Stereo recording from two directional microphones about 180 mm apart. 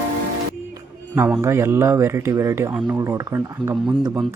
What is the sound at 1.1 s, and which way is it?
Speech, 15° right (ahead or behind).